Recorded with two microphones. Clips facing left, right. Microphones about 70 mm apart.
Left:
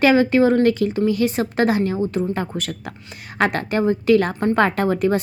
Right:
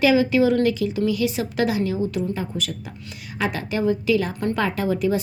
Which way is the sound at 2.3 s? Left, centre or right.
Left.